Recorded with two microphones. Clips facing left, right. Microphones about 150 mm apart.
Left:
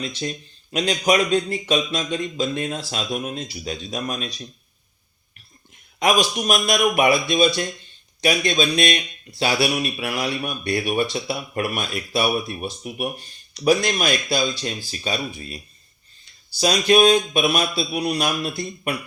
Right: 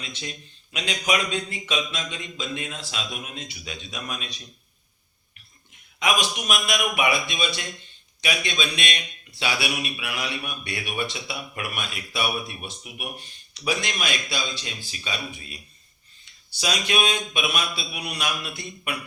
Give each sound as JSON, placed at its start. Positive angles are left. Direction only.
{"t": 0.0, "sound": "speech", "side_deg": 40}
{"t": 6.0, "sound": "speech", "side_deg": 40}